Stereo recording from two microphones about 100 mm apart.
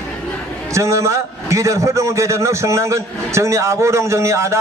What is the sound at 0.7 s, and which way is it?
A man's voice, 30° right (ahead or behind).